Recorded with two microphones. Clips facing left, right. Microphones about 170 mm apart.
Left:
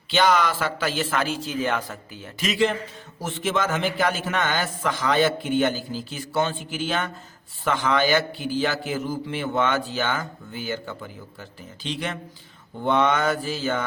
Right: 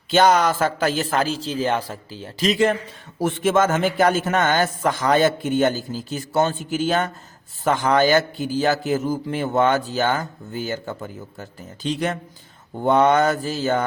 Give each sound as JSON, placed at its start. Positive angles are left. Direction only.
{"t": 0.1, "sound": "a man's voice", "side_deg": -45}
{"t": 3.2, "sound": "a man's voice", "side_deg": -55}